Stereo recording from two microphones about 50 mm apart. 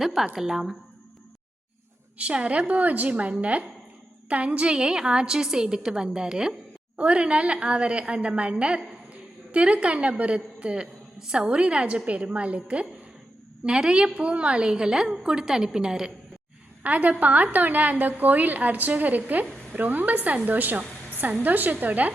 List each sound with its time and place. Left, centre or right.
0.0 s a woman's voice: centre
2.1 s a woman's voice: right
6.9 s a woman's voice: right
13.7 s a woman's voice: centre
16.8 s a woman's voice: right